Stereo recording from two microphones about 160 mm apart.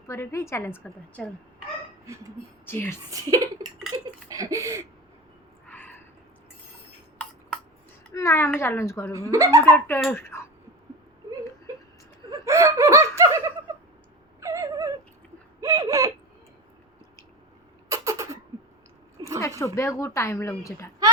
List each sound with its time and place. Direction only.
0.1 s a woman's voice: 15° left (ahead or behind)
0.9 s a woman's voice: 5° left (ahead or behind)
2.6 s speech: 15° left (ahead or behind)
3.1 s a sound: 20° right (ahead or behind)
5.6 s a sound: 10° left (ahead or behind)
8.1 s a woman's voice: 20° left (ahead or behind)
9.1 s speech: 20° right (ahead or behind)
9.6 s speech: 10° left (ahead or behind)
12.5 s laughter: 15° right (ahead or behind)
14.4 s a sound: 20° right (ahead or behind)
17.8 s a sound: 20° right (ahead or behind)
19.4 s a woman's voice: 20° left (ahead or behind)